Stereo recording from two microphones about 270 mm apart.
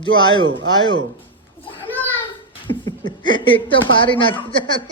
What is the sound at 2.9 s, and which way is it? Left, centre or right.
A child's voice, centre.